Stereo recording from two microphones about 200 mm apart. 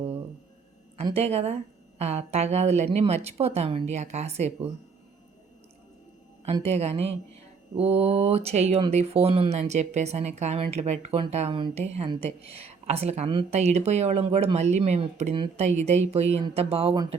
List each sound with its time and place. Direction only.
0.9 s speech: 30° right (ahead or behind)
6.4 s speech: 30° right (ahead or behind)